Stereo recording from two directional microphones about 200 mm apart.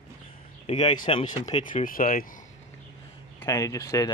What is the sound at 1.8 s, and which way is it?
Speech, 45° left (ahead or behind).